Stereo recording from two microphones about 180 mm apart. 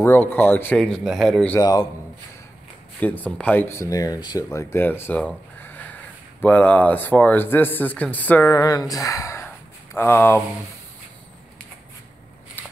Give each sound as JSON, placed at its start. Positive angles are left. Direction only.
{"t": 0.0, "sound": "speech", "side_deg": 10}
{"t": 1.6, "sound": "speech", "side_deg": 20}
{"t": 3.0, "sound": "speech", "side_deg": 10}